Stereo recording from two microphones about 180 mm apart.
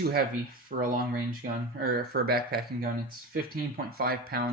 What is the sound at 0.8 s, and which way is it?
Speech, 55° right (ahead or behind).